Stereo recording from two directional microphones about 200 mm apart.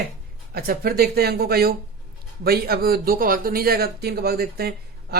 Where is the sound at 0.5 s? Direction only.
50° right (ahead or behind).